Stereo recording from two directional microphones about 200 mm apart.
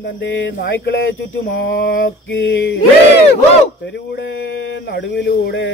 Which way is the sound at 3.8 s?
60° left (ahead or behind).